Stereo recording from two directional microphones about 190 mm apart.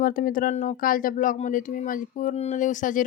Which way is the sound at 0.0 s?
45° left (ahead or behind).